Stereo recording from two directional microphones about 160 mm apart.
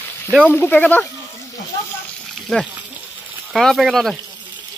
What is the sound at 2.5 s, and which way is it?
Speech, centre (ahead or behind).